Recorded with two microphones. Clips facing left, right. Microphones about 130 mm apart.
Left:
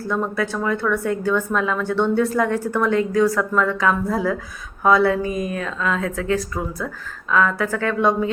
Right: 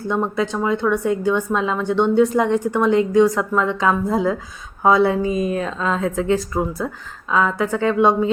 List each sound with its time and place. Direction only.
0.0 s a woman's voice: 20° right (ahead or behind)